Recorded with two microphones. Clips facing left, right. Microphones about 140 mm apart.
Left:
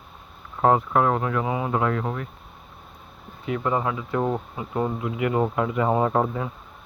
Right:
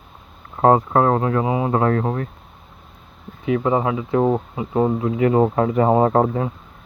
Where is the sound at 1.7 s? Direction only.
40° right (ahead or behind).